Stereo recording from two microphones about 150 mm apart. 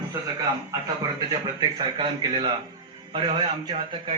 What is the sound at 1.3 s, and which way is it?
A man's voice, 30° right (ahead or behind).